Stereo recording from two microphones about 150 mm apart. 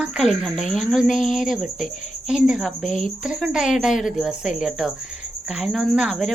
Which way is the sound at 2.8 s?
55° left (ahead or behind).